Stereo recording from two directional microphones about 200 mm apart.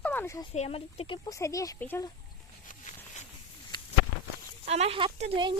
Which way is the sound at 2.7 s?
35° left (ahead or behind).